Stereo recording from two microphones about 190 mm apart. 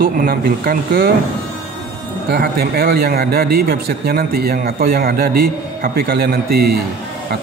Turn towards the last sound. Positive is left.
turn(degrees=-55)  # may be behind; listen again after turning